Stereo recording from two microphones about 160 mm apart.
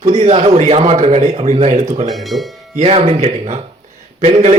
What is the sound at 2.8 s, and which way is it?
Speech, 40° right (ahead or behind).